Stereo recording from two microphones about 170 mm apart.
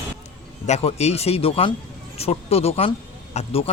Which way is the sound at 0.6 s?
40° left (ahead or behind).